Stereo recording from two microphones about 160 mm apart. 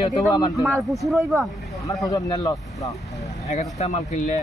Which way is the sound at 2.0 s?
20° left (ahead or behind).